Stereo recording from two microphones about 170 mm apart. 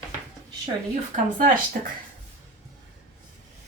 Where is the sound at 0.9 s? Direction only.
50° right (ahead or behind).